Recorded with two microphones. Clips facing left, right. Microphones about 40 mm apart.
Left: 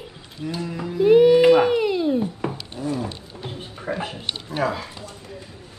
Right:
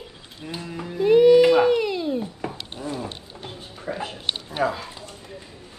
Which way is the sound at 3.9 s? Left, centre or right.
Left.